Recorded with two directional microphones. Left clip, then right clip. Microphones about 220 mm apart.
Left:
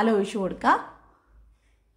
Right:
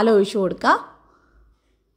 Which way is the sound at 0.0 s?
20° right (ahead or behind).